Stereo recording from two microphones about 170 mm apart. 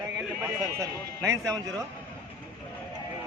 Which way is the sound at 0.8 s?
15° right (ahead or behind).